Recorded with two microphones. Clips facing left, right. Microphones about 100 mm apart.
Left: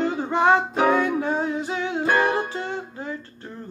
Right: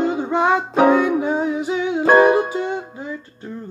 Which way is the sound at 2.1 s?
15° right (ahead or behind).